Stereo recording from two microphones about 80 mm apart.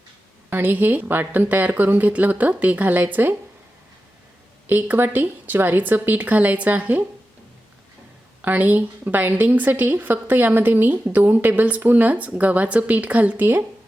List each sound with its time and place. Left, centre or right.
0.5 s a woman's voice: right
4.6 s a woman's voice: right
8.4 s a woman's voice: right